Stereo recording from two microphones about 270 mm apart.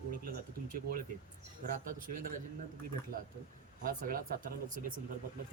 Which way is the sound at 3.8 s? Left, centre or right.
Right.